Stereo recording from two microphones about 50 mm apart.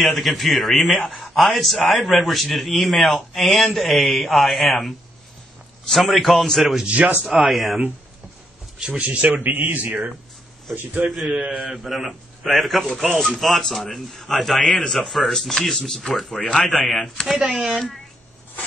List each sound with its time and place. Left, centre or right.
0.0 s a man's voice: centre
5.9 s a man's voice: centre
6.9 s speech: right
7.4 s a man's voice: centre
8.7 s speech: right
9.4 s speech: right
11.1 s a man's voice: centre
17.6 s speech: centre